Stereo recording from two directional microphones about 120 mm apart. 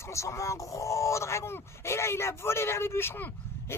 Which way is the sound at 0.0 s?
25° left (ahead or behind).